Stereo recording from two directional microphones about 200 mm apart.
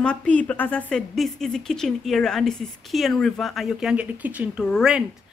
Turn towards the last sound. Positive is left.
turn(degrees=0)  # may be behind; listen again after turning